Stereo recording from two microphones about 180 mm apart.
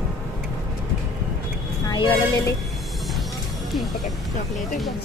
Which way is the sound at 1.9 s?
25° left (ahead or behind).